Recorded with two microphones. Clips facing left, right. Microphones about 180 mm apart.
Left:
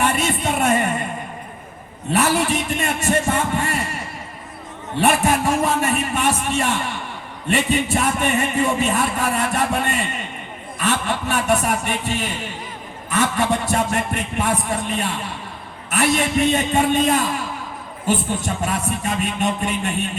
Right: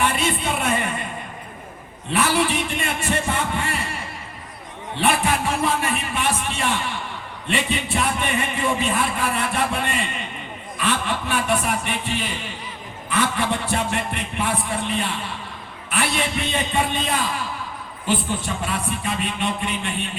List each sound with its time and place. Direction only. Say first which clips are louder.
0.0 s music: left 2 dB; 40° left (ahead or behind)
2.1 s a man's voice: left 2 dB; 40° left (ahead or behind)
4.9 s a man's voice: left 3 dB; 40° left (ahead or behind)